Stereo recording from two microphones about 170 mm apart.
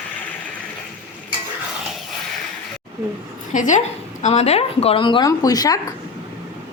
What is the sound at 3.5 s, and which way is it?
A woman's voice, 50° left (ahead or behind).